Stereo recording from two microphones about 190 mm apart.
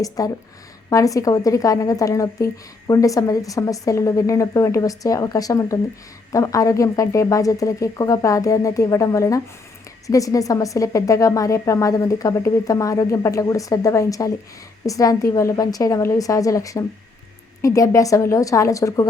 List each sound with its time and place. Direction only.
0.2 s a woman's voice: 20° left (ahead or behind)